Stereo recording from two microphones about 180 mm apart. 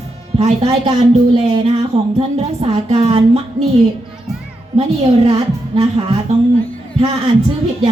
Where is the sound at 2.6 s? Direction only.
35° right (ahead or behind).